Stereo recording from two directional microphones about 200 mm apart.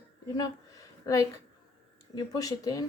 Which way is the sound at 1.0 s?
15° left (ahead or behind).